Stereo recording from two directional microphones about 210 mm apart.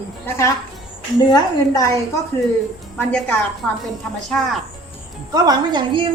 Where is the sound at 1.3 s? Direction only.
15° left (ahead or behind).